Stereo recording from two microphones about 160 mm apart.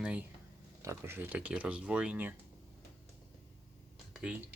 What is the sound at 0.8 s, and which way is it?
Speech, 15° right (ahead or behind).